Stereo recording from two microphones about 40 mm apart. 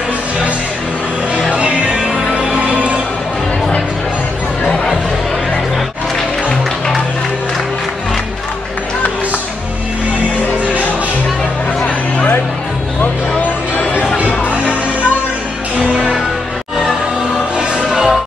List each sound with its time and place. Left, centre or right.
2.0 s music: centre
2.6 s music: right
13.4 s music: left
17.6 s music: centre